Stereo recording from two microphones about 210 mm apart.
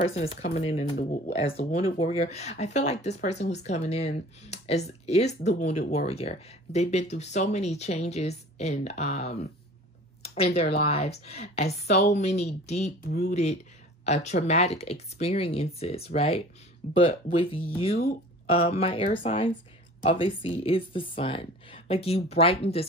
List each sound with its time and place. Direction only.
0.0 s speech: 30° left (ahead or behind)